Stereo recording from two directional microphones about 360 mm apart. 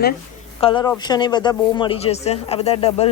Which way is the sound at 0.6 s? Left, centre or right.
Centre.